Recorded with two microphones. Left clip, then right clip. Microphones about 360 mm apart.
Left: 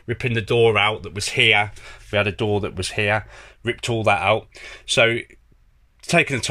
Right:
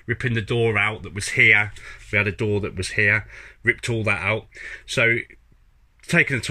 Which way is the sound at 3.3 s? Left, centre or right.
Left.